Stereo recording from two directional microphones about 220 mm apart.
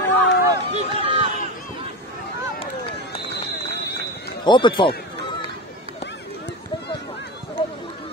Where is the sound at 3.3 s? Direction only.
50° left (ahead or behind).